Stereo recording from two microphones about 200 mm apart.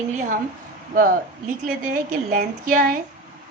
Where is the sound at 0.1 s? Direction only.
40° right (ahead or behind).